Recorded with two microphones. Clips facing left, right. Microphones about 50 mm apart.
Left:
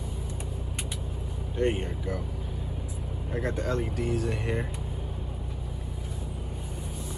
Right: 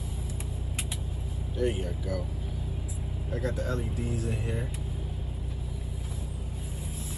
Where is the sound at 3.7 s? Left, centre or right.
Left.